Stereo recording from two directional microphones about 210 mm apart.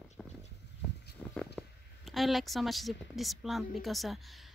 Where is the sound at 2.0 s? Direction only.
Centre (ahead or behind).